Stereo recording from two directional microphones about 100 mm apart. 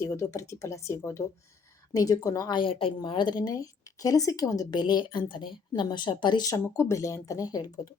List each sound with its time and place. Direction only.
0.0 s speech: 30° left (ahead or behind)
2.5 s a woman's voice: 60° left (ahead or behind)
6.5 s speech: 30° left (ahead or behind)